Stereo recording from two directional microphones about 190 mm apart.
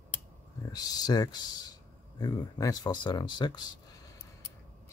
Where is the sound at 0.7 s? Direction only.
20° left (ahead or behind).